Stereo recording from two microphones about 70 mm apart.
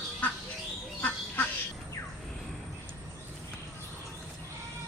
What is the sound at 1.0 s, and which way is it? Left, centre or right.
Duck, left.